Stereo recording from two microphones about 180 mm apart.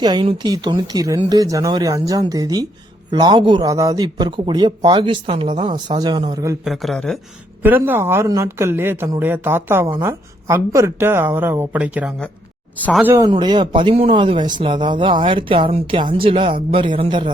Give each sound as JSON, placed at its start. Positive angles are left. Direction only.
{"t": 0.0, "sound": "a man's voice", "side_deg": -25}
{"t": 6.7, "sound": "speech", "side_deg": 0}
{"t": 7.6, "sound": "speech", "side_deg": -10}
{"t": 12.7, "sound": "speech", "side_deg": 10}
{"t": 13.0, "sound": "speech", "side_deg": -15}
{"t": 13.3, "sound": "a man's voice", "side_deg": -25}